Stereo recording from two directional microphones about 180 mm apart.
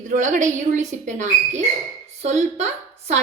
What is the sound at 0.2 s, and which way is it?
A woman's voice, 45° right (ahead or behind).